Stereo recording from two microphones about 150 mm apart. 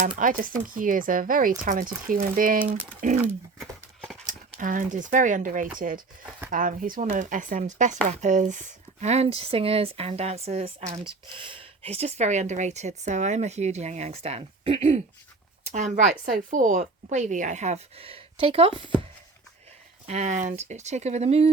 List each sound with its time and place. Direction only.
0.0 s speech: 65° right (ahead or behind)
3.6 s horse: centre (ahead or behind)
4.3 s speech: 60° right (ahead or behind); by 18.9 s 35° right (ahead or behind)
20.1 s speech: 50° right (ahead or behind)